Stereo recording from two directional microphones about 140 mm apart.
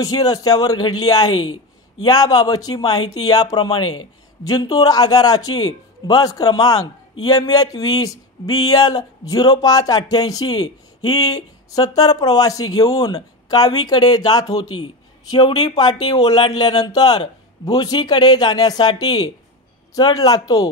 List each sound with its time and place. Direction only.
0.0 s a man's voice: 25° left (ahead or behind)